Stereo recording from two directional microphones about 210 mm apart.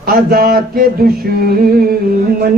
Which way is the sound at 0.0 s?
45° right (ahead or behind).